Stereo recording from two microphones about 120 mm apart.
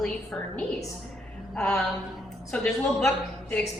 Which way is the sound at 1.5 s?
5° left (ahead or behind).